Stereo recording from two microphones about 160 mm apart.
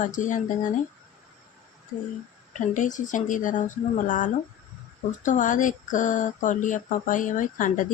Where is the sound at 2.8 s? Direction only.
50° left (ahead or behind).